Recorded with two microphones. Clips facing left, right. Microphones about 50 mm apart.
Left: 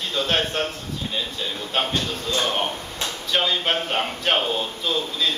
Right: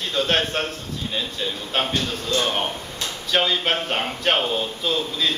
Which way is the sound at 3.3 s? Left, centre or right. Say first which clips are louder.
Right 1 dB; centre.